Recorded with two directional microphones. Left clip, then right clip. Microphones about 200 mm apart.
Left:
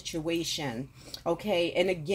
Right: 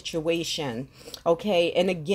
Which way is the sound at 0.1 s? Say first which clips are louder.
Right 5 dB; 35° right (ahead or behind).